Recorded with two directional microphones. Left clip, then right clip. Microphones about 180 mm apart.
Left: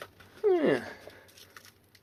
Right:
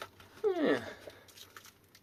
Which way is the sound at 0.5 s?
35° left (ahead or behind).